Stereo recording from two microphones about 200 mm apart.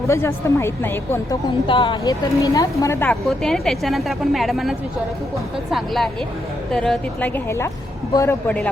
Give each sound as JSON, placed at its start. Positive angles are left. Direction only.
{"t": 0.1, "sound": "a woman's voice", "side_deg": 15}
{"t": 1.6, "sound": "a woman's voice", "side_deg": 25}
{"t": 3.2, "sound": "a woman's voice", "side_deg": 0}